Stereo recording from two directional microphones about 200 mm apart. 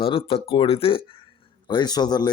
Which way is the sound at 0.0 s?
25° left (ahead or behind).